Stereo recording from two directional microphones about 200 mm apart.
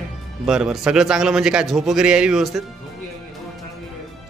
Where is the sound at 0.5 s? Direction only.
5° right (ahead or behind).